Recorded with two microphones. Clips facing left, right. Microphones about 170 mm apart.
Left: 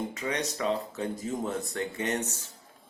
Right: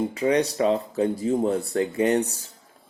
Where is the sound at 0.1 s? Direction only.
35° right (ahead or behind).